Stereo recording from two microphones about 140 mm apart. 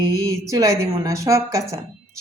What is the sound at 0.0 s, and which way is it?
A woman's voice, 25° right (ahead or behind).